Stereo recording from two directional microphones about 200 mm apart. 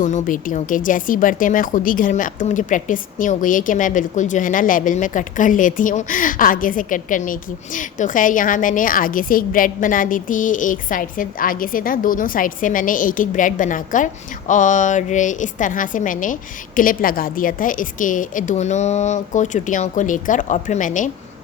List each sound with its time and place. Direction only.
0.0 s a woman's voice: 40° left (ahead or behind)